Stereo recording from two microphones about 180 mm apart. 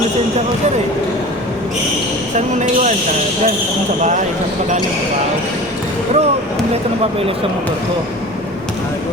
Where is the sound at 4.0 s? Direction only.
45° right (ahead or behind).